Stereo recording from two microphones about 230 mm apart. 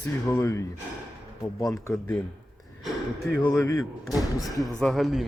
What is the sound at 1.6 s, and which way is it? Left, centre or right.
Speech, centre.